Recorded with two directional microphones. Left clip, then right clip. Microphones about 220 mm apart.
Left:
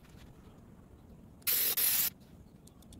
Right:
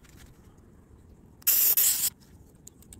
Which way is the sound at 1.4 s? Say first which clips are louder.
Right 6 dB; 15° right (ahead or behind).